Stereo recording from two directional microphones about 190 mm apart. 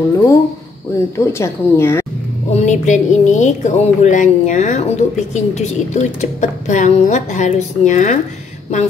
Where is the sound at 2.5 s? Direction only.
35° left (ahead or behind).